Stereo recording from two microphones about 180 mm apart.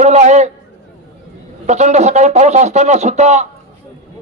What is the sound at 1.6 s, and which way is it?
A man's voice, 40° right (ahead or behind).